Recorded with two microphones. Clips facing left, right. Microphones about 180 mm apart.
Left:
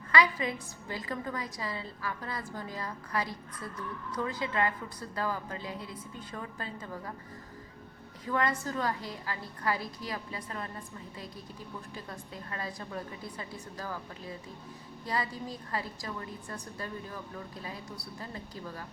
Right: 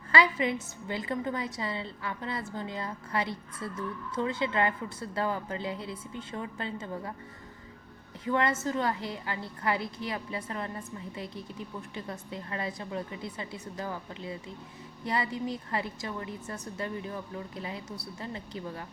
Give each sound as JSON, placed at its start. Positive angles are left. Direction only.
{"t": 0.1, "sound": "a woman's voice", "side_deg": -25}
{"t": 8.2, "sound": "a woman's voice", "side_deg": -25}
{"t": 12.3, "sound": "a woman's voice", "side_deg": -25}
{"t": 15.0, "sound": "a woman's voice", "side_deg": -25}
{"t": 18.2, "sound": "a woman's voice", "side_deg": -25}